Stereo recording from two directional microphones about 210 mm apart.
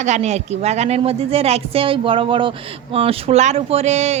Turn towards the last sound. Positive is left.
turn(degrees=-30)  # may be behind; listen again after turning